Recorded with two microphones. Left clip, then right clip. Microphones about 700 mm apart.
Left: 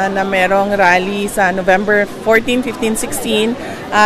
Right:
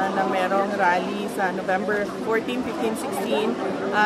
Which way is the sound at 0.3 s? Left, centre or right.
Left.